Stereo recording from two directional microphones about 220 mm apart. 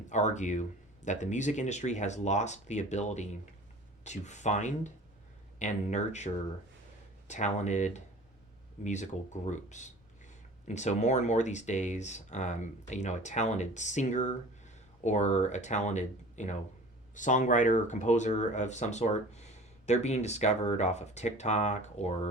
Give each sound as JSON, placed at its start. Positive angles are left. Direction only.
{"t": 0.1, "sound": "speech", "side_deg": 35}
{"t": 7.3, "sound": "speech", "side_deg": 30}